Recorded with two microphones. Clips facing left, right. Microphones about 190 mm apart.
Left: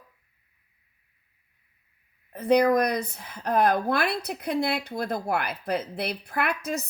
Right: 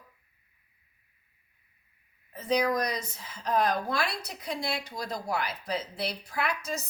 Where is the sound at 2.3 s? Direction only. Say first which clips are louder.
Left 7 dB; 60° left (ahead or behind).